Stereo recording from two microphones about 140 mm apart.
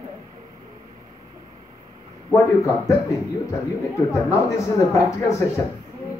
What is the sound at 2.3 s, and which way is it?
Speech, 20° left (ahead or behind).